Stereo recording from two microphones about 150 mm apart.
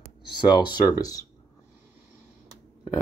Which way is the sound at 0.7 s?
25° left (ahead or behind).